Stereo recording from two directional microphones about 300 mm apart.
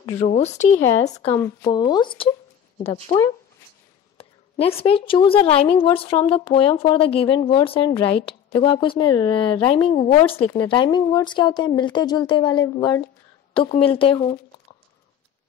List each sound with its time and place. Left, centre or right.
0.2 s speech: left
1.2 s speech: centre